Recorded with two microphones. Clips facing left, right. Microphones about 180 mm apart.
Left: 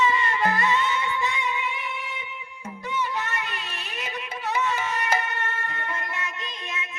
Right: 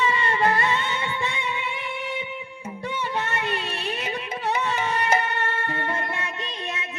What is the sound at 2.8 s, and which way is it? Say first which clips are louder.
Music: right 1 dB; 30° right (ahead or behind).